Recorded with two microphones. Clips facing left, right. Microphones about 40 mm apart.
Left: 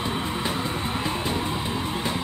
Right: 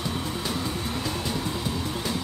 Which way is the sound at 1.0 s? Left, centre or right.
Left.